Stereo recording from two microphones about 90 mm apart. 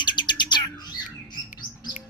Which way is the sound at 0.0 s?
60° left (ahead or behind).